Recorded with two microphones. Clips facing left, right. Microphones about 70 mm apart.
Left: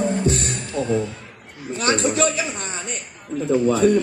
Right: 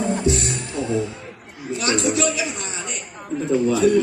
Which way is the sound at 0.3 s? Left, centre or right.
Left.